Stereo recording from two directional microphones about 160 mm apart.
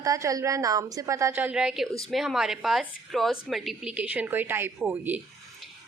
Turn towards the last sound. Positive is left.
turn(degrees=-10)  # may be behind; listen again after turning